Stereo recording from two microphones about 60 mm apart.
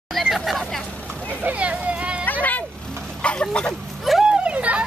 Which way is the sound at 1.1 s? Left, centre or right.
Left.